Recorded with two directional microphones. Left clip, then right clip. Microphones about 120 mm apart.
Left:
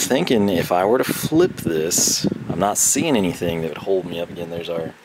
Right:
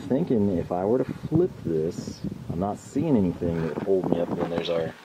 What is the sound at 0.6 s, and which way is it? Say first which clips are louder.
Speech: left 10 dB; 45° left (ahead or behind).